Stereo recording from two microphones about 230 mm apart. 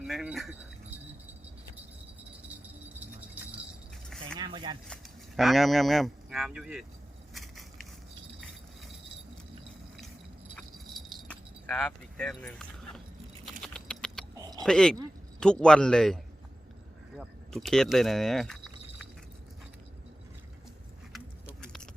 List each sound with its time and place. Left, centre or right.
0.0 s speech: centre
4.4 s speech: right
5.4 s speech: centre
7.3 s crushing: centre
10.5 s keys jangling: centre
13.6 s typing: centre
14.3 s a sound: centre
14.6 s speech: centre
21.1 s a sound: centre